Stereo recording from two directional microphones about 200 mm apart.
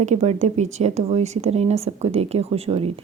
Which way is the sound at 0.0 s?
35° right (ahead or behind).